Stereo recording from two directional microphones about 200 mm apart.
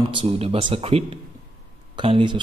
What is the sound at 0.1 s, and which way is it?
Speech, 25° right (ahead or behind).